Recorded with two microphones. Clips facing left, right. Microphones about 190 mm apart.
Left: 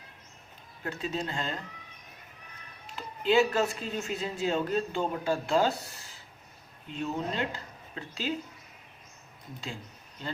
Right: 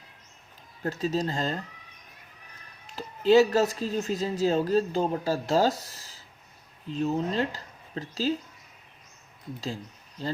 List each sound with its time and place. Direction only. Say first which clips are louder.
0.9 s speech: right 6 dB; 40° right (ahead or behind)
2.9 s speech: right 6 dB; 40° right (ahead or behind)